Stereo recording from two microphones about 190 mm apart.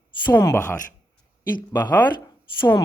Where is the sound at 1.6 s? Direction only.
20° left (ahead or behind).